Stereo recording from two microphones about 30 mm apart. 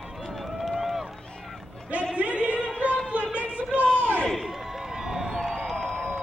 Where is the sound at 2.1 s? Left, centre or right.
Right.